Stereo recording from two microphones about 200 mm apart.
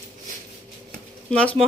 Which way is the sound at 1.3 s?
5° left (ahead or behind).